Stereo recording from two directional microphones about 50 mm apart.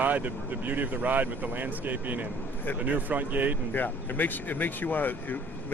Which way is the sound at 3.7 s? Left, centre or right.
Left.